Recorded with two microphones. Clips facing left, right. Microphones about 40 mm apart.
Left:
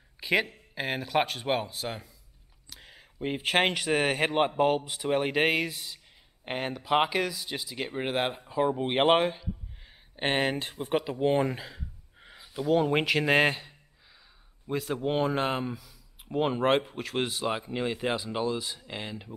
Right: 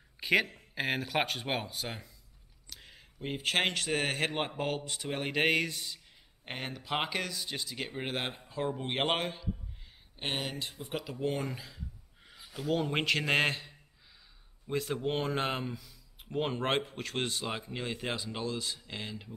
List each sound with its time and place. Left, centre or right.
0.2 s speech: centre
2.7 s a sound: centre
3.2 s speech: centre
10.1 s speech: left
12.6 s speech: centre